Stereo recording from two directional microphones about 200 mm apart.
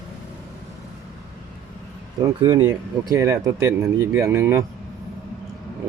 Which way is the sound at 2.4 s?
20° right (ahead or behind).